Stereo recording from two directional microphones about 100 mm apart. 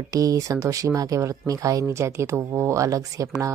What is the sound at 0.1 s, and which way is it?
Speech, 35° right (ahead or behind).